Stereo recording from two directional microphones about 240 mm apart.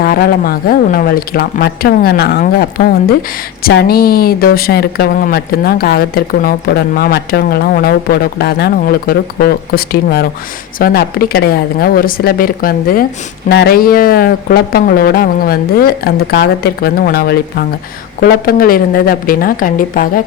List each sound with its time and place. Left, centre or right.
0.0 s speech: left